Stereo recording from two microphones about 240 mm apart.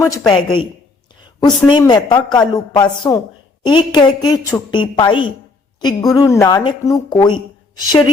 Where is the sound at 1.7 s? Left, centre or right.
Centre.